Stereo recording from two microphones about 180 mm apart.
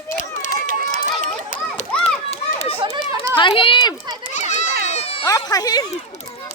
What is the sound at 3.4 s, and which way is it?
Speech, 30° left (ahead or behind).